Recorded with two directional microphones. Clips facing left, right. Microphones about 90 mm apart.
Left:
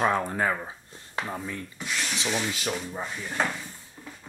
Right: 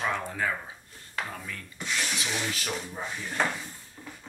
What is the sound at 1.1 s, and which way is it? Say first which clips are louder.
Speech: left 4 dB; 25° left (ahead or behind).